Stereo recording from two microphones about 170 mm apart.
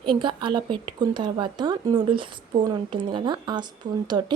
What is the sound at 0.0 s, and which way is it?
Speech, 30° right (ahead or behind).